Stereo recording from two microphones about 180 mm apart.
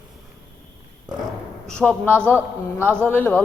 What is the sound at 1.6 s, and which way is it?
A man's voice, 5° left (ahead or behind).